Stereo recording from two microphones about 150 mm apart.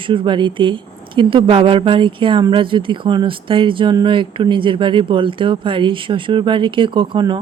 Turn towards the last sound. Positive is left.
turn(degrees=-30)  # may be behind; listen again after turning